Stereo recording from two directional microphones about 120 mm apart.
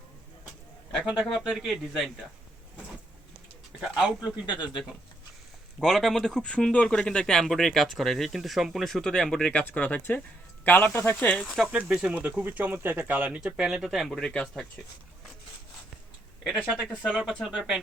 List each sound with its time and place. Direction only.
0.9 s speech: centre (ahead or behind)
3.8 s speech: centre (ahead or behind)
11.4 s speech: centre (ahead or behind)
16.7 s speech: 5° left (ahead or behind)